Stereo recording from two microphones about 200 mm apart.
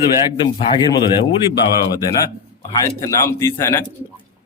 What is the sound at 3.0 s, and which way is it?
Speech, 15° left (ahead or behind).